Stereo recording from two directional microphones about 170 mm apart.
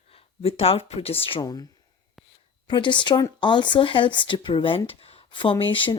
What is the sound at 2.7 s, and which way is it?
Speech, 30° left (ahead or behind).